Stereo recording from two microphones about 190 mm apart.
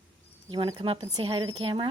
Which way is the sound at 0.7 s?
30° right (ahead or behind).